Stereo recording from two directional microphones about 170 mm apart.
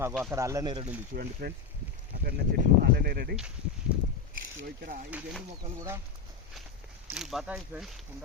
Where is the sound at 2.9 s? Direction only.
70° right (ahead or behind).